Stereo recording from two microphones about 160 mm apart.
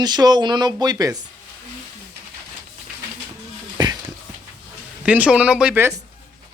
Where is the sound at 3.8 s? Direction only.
25° right (ahead or behind).